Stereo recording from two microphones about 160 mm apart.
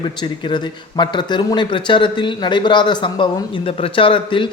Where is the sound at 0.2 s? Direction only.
30° left (ahead or behind).